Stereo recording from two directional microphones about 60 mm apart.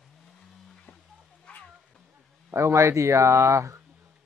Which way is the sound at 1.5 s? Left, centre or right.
Centre.